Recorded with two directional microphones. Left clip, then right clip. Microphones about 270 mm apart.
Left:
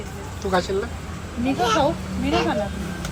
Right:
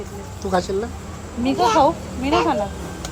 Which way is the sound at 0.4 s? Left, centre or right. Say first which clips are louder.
Right 1 dB; centre.